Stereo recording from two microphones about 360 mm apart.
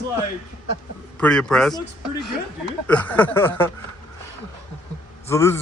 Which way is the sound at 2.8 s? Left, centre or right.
Centre.